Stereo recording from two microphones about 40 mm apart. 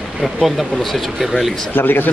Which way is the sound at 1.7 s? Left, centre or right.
Left.